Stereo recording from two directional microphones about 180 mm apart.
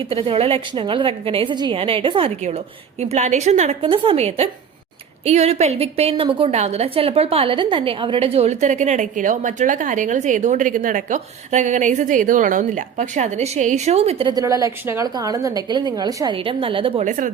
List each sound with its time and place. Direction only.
0.0 s a woman's voice: 30° right (ahead or behind)